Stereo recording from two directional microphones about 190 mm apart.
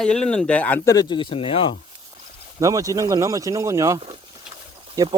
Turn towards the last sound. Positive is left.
turn(degrees=-20)  # may be behind; listen again after turning